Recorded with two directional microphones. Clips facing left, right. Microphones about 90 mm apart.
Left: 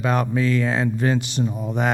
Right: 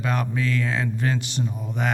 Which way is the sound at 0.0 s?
15° left (ahead or behind).